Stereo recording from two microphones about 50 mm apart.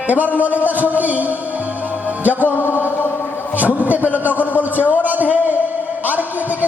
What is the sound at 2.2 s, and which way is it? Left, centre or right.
Music, right.